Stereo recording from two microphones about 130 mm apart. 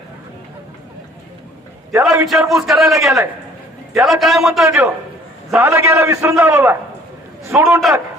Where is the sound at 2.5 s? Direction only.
Centre (ahead or behind).